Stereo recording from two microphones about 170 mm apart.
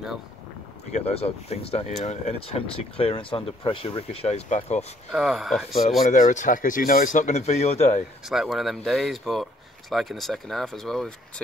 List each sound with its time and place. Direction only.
0.9 s speech: 35° left (ahead or behind)
5.1 s speech: centre (ahead or behind)
6.0 s speech: 50° left (ahead or behind)
8.3 s speech: centre (ahead or behind)